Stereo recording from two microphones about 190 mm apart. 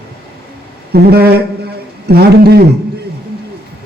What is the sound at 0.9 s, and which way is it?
Speech, 55° right (ahead or behind).